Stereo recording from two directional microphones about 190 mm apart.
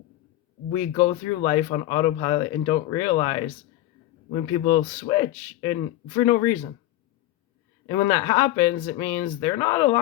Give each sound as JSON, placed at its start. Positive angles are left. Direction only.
{"t": 0.7, "sound": "speech", "side_deg": 25}
{"t": 4.7, "sound": "speech", "side_deg": 20}
{"t": 7.9, "sound": "speech", "side_deg": 15}